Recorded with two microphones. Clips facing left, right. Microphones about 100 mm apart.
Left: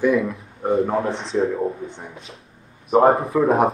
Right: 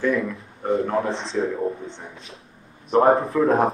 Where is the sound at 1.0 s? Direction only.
30° right (ahead or behind).